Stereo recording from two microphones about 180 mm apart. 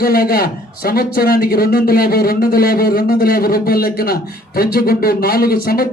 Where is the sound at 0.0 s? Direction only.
55° left (ahead or behind).